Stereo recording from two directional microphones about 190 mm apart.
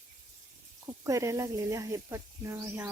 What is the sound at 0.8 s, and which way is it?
Speech, 15° right (ahead or behind).